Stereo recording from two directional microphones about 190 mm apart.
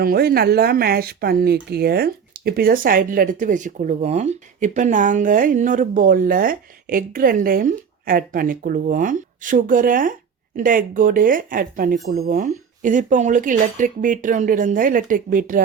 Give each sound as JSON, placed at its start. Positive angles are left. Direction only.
{"t": 0.0, "sound": "speech", "side_deg": -55}